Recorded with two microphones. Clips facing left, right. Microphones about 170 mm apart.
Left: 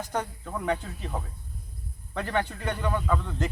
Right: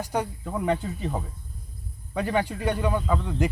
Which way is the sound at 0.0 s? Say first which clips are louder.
Right 3 dB; 10° right (ahead or behind).